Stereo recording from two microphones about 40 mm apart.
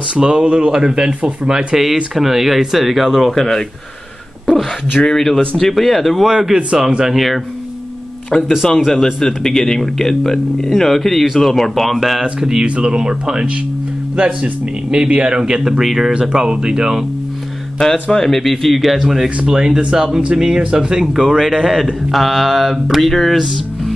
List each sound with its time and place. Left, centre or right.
0.2 s speech: right
2.1 s speech: centre
5.0 s speech: centre
8.3 s speech: centre
12.6 s speech: right; by 16.1 s centre
16.1 s speech: right
18.1 s speech: centre
19.4 s speech: centre